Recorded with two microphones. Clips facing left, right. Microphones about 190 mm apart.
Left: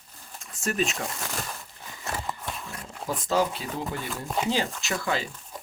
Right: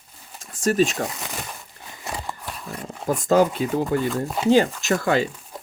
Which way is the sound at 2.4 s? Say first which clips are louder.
Even; centre (ahead or behind).